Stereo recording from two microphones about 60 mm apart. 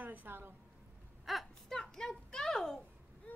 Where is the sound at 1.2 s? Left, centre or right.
Centre.